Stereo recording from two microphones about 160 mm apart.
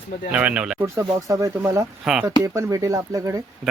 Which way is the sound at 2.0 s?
5° right (ahead or behind).